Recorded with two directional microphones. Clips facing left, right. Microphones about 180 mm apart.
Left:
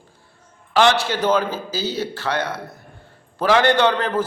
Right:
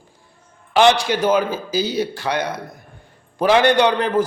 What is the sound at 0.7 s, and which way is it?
A man's voice, 15° right (ahead or behind).